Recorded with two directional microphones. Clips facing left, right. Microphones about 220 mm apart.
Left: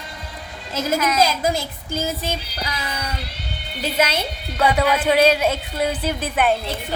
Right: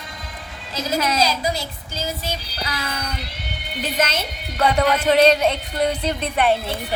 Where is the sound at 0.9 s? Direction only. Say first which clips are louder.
Right 1 dB; 30° right (ahead or behind).